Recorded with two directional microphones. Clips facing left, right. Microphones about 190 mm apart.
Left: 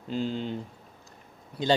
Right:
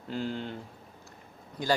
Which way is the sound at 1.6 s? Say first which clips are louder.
Left 3 dB; 20° left (ahead or behind).